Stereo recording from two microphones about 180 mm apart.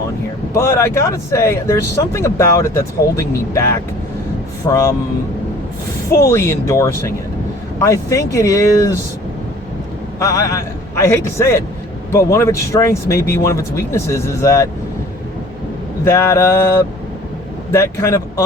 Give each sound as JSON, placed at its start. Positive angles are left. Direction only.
{"t": 0.5, "sound": "speech", "side_deg": 15}
{"t": 6.1, "sound": "speech", "side_deg": 15}
{"t": 10.2, "sound": "speech", "side_deg": 20}
{"t": 16.0, "sound": "speech", "side_deg": 15}